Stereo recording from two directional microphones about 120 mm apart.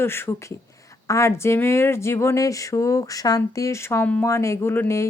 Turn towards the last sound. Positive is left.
turn(degrees=25)  # may be behind; listen again after turning